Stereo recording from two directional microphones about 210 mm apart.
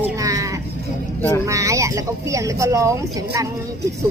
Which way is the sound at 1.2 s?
10° left (ahead or behind).